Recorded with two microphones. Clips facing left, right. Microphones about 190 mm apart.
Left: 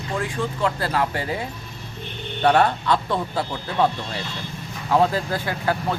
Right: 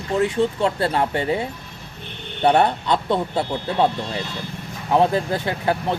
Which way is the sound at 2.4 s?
25° right (ahead or behind).